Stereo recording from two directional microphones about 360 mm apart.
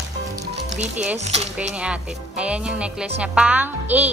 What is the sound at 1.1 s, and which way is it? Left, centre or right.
Speech, centre.